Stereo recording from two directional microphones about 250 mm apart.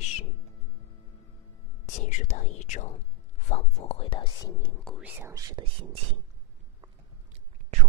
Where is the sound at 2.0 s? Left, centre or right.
Left; by 5.7 s centre.